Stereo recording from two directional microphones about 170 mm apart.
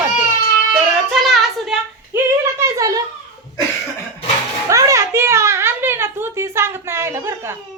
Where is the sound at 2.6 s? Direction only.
15° right (ahead or behind).